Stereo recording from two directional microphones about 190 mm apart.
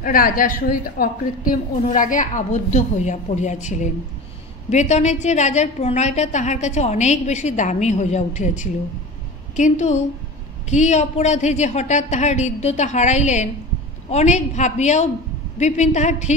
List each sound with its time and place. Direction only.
0.0 s a woman's voice: 45° left (ahead or behind)